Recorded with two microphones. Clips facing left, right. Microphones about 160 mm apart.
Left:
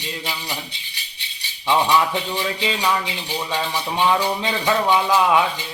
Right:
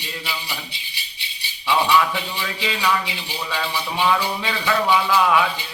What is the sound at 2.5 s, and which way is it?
Music, 25° left (ahead or behind).